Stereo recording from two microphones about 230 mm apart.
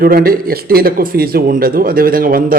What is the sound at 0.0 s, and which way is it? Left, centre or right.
A man's voice, right.